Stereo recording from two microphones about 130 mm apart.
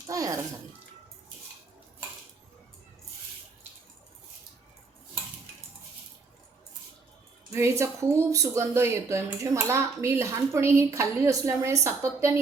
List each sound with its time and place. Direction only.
0.1 s speech: 25° right (ahead or behind)
7.5 s speech: 20° right (ahead or behind)